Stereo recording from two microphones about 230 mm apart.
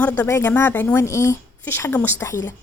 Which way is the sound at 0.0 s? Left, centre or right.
Centre.